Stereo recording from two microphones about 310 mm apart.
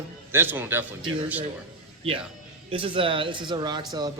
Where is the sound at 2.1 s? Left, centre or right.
Centre.